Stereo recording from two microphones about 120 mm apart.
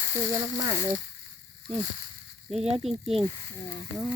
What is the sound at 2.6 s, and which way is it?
Speech, 55° right (ahead or behind).